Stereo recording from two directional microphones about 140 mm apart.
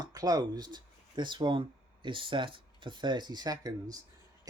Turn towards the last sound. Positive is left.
turn(degrees=-25)  # may be behind; listen again after turning